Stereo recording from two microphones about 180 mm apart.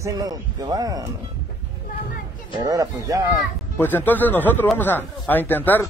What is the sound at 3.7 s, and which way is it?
Speech, 10° left (ahead or behind).